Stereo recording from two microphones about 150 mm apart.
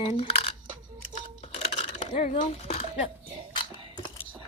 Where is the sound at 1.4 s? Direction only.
45° left (ahead or behind).